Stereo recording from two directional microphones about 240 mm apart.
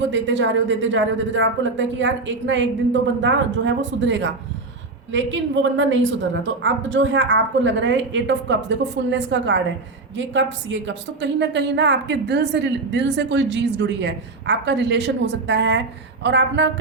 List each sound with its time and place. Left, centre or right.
0.1 s a woman's voice: right